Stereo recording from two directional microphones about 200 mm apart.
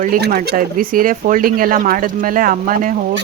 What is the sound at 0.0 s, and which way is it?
Speech, 45° right (ahead or behind).